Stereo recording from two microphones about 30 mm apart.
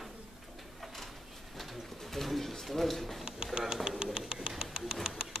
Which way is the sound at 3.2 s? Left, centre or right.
Right.